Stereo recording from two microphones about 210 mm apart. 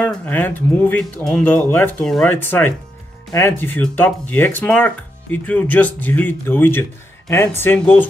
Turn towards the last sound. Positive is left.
turn(degrees=5)  # may be behind; listen again after turning